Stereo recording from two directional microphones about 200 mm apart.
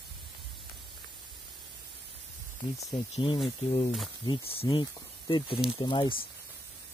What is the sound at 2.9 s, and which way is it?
Speech, 25° left (ahead or behind).